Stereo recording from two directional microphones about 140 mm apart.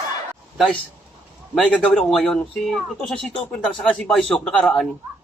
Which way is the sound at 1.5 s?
5° left (ahead or behind).